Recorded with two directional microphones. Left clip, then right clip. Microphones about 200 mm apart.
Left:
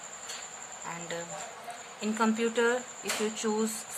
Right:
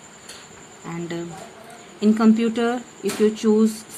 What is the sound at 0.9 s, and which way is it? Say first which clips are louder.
A woman's voice: right 7 dB; 20° right (ahead or behind).